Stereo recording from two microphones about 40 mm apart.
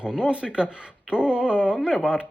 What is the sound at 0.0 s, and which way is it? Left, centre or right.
Speech, right.